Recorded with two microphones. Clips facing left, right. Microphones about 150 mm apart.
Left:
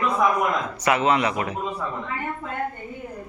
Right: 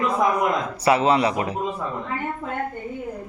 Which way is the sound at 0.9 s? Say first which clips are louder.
Right 3 dB; 30° right (ahead or behind).